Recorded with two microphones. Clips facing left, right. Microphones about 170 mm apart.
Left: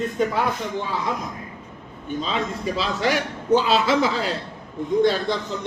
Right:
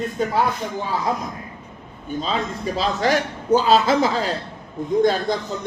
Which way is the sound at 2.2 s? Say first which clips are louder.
Right 1 dB; 40° right (ahead or behind).